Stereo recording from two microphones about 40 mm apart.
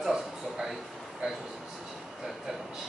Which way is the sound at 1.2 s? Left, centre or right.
Centre.